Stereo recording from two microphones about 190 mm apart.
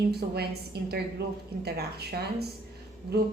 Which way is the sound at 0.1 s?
55° right (ahead or behind).